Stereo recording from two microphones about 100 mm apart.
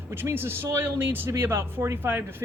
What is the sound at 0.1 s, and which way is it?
Speech, 20° right (ahead or behind).